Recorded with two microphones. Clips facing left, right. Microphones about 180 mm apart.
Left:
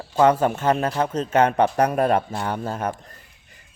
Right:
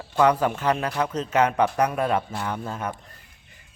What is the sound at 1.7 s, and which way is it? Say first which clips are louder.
Speech: left 4 dB; 40° left (ahead or behind).